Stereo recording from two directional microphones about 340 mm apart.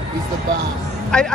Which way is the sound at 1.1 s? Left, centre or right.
Centre.